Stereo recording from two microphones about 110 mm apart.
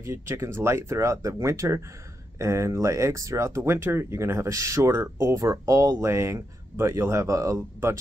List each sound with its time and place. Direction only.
0.0 s speech: 25° right (ahead or behind)